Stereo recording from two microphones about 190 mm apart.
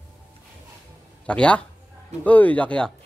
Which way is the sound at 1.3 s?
5° left (ahead or behind).